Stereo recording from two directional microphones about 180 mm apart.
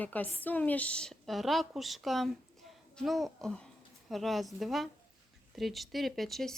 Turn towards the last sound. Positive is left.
turn(degrees=0)  # may be behind; listen again after turning